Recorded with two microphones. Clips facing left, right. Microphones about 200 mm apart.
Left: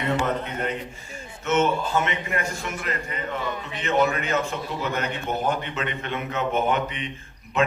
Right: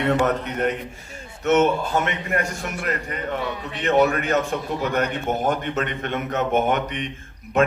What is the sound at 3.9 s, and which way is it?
A man's voice, 60° right (ahead or behind).